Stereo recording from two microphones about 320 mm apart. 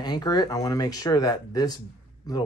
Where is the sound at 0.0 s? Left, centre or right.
Centre.